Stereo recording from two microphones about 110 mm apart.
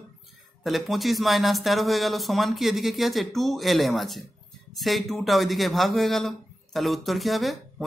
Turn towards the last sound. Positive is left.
turn(degrees=0)  # may be behind; listen again after turning